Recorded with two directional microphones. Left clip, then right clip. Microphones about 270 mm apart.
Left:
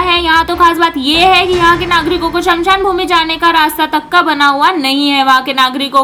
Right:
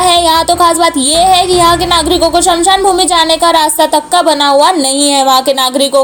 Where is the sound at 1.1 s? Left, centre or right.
Centre.